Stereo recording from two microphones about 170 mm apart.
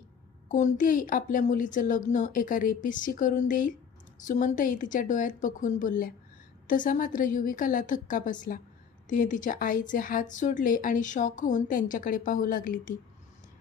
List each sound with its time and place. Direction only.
0.5 s a woman's voice: 45° left (ahead or behind)